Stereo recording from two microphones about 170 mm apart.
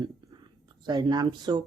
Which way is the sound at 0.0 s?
25° right (ahead or behind).